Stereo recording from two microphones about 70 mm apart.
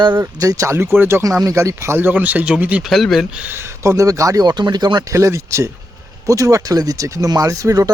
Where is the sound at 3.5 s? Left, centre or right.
Right.